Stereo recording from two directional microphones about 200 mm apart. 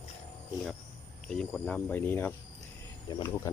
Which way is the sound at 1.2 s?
5° left (ahead or behind).